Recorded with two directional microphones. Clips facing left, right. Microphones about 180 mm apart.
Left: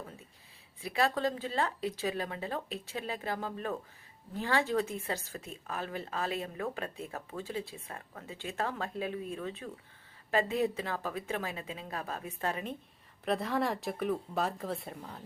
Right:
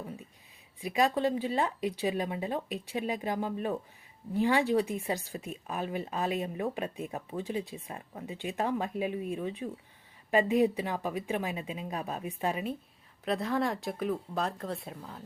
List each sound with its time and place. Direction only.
0.8 s speech: 15° right (ahead or behind)
13.2 s speech: centre (ahead or behind)